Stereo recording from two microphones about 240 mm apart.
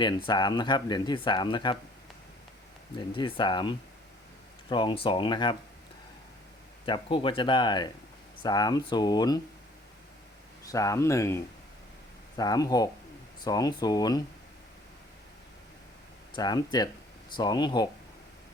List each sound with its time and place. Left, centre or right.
0.0 s speech: centre
3.0 s speech: centre
6.8 s speech: left
10.7 s speech: centre
12.4 s speech: centre
16.3 s speech: centre